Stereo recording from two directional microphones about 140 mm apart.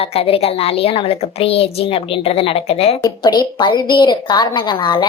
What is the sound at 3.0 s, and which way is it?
A woman's voice, 30° left (ahead or behind).